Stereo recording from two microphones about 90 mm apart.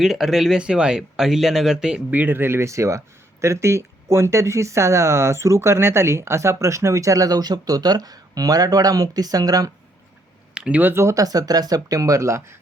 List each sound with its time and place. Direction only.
0.0 s speech: 5° right (ahead or behind)
2.1 s speech: 20° right (ahead or behind); by 9.7 s 40° right (ahead or behind)
10.5 s speech: 15° right (ahead or behind)
11.0 s speech: 40° right (ahead or behind)